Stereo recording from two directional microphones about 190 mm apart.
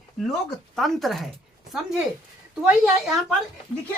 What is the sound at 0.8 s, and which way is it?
A woman's voice, centre (ahead or behind).